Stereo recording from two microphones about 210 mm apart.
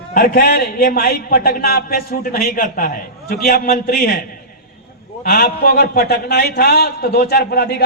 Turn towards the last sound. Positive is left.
turn(degrees=50)  # may be behind; listen again after turning